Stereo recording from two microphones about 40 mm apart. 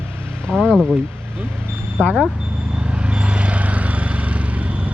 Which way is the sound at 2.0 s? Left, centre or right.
Left.